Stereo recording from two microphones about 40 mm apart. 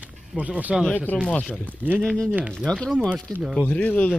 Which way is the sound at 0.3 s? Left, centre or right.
Right.